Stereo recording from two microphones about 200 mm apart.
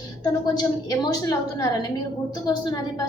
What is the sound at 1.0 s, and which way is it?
A woman's voice, 20° left (ahead or behind).